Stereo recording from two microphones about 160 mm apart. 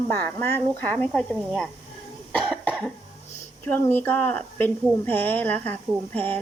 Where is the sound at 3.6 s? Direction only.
10° left (ahead or behind).